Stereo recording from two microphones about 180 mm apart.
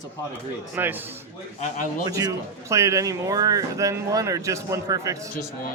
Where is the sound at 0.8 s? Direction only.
10° right (ahead or behind).